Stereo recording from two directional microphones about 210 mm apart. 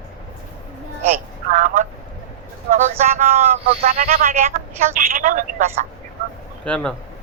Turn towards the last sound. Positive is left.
turn(degrees=5)  # may be behind; listen again after turning